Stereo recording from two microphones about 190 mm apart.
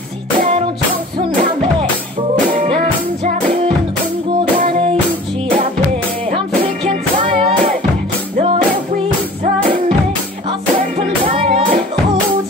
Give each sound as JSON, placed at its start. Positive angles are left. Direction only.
{"t": 3.3, "sound": "music", "side_deg": -40}
{"t": 6.3, "sound": "music", "side_deg": -30}
{"t": 10.8, "sound": "music", "side_deg": -45}
{"t": 11.3, "sound": "music", "side_deg": -30}